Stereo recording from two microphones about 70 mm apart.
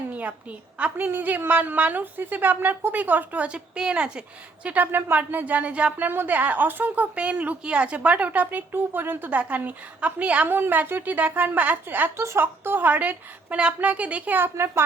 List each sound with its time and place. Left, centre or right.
0.1 s a woman's voice: centre
12.1 s a woman's voice: right
14.5 s speech: right